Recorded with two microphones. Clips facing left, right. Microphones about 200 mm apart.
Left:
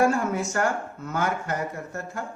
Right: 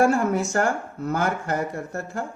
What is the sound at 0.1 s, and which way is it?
Speech, 35° right (ahead or behind).